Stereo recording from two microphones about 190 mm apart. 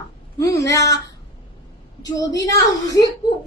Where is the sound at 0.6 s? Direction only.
15° left (ahead or behind).